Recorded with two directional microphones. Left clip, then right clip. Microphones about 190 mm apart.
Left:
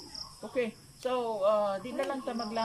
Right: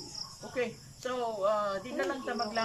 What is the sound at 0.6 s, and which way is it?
Speech, 15° left (ahead or behind).